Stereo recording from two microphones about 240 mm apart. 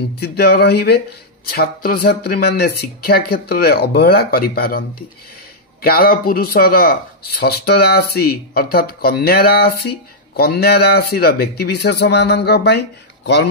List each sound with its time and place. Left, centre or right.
0.2 s speech: left